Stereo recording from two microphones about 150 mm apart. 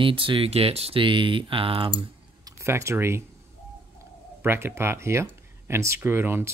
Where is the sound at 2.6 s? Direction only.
15° right (ahead or behind).